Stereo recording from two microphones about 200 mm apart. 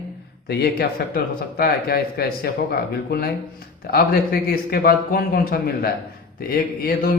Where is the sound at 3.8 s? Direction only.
50° left (ahead or behind).